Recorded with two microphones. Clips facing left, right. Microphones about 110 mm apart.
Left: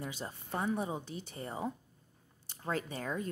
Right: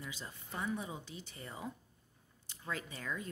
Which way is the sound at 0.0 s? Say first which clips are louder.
Left 6 dB; 45° left (ahead or behind).